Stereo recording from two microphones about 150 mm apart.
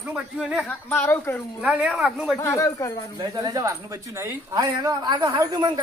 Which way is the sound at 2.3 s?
20° left (ahead or behind).